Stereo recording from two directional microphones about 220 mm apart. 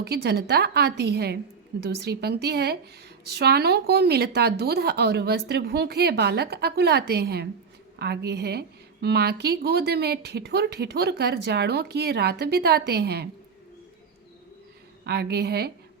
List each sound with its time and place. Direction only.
0.0 s a woman's voice: 50° right (ahead or behind)
15.0 s a woman's voice: 50° right (ahead or behind)